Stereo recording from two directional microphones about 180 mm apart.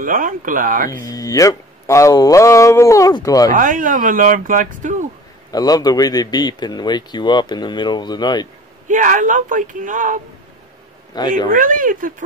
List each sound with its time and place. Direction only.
0.0 s speech: 50° right (ahead or behind)
0.8 s a man's voice: 20° left (ahead or behind)
3.5 s speech: 45° right (ahead or behind)
5.5 s a man's voice: 20° left (ahead or behind)
8.8 s speech: 45° right (ahead or behind)
11.1 s a man's voice: 25° left (ahead or behind)
11.5 s speech: 50° right (ahead or behind)